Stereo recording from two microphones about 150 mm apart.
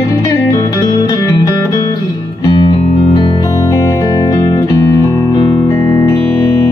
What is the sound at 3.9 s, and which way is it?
Music, 25° left (ahead or behind).